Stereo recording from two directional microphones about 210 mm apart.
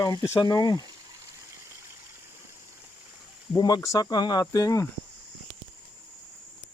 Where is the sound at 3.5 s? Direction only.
15° left (ahead or behind).